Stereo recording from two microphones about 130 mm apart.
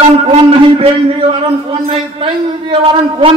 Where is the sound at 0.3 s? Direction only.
45° right (ahead or behind).